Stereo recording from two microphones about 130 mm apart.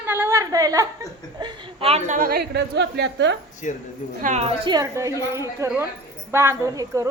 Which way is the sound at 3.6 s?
75° left (ahead or behind).